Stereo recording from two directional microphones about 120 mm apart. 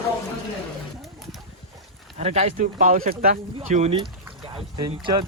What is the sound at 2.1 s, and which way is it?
Speech, 70° right (ahead or behind).